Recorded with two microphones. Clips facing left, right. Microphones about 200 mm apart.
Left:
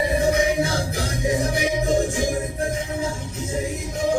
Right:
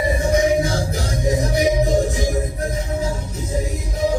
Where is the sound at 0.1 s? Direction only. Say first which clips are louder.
Right 2 dB; 60° left (ahead or behind).